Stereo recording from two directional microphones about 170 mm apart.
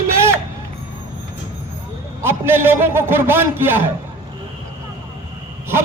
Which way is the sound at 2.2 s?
15° right (ahead or behind).